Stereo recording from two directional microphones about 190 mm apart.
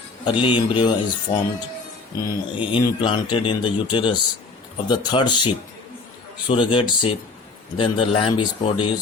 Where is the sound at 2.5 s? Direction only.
25° left (ahead or behind).